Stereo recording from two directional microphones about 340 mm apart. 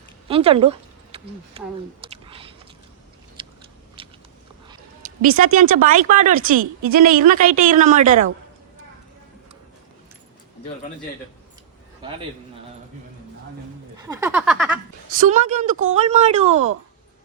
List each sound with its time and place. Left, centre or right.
0.3 s speech: centre
2.2 s biting: centre
4.0 s walk: centre
5.2 s speech: right
14.0 s a sound: centre
15.1 s speech: right